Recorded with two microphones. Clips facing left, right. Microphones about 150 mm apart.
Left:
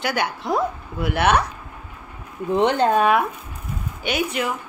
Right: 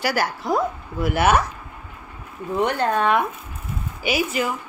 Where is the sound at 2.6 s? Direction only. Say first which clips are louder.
Left 3 dB; 20° left (ahead or behind).